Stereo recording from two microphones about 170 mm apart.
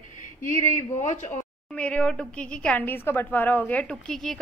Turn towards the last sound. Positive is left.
turn(degrees=5)  # may be behind; listen again after turning